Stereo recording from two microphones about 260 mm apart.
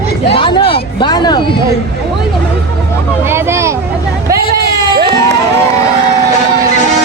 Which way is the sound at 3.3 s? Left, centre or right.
Centre.